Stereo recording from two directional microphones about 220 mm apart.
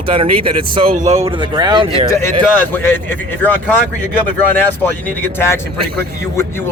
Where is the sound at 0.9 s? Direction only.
35° right (ahead or behind).